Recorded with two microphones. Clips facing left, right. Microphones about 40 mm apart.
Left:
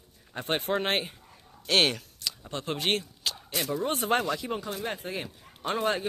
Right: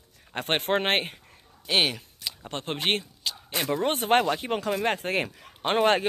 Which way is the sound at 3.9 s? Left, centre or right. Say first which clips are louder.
Right 5 dB; right.